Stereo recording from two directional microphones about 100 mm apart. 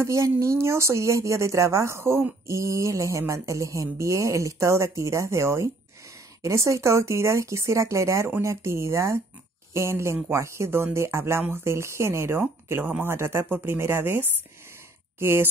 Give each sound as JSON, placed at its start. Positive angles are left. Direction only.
{"t": 0.0, "sound": "speech", "side_deg": -30}